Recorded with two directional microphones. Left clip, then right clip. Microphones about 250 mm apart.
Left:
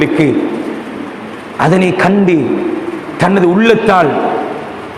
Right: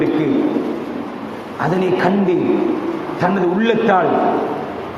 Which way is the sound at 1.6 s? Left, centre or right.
Left.